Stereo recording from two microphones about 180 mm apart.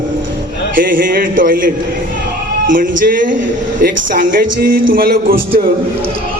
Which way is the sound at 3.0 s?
50° right (ahead or behind).